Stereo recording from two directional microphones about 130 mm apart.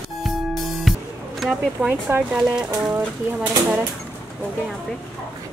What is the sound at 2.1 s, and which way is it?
Speech, 20° right (ahead or behind).